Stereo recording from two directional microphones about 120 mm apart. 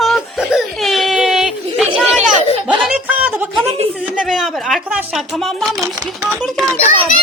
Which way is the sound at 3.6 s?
55° right (ahead or behind).